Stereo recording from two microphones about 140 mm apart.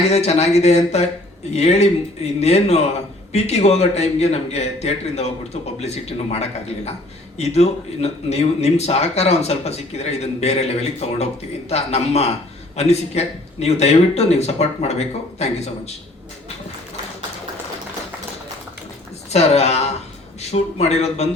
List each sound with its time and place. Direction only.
0.1 s speech: 50° left (ahead or behind)
19.3 s speech: 50° left (ahead or behind)